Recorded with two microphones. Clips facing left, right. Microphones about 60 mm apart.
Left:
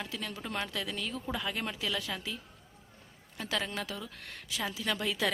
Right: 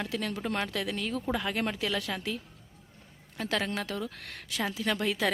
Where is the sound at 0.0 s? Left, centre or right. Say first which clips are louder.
Right 6 dB; right.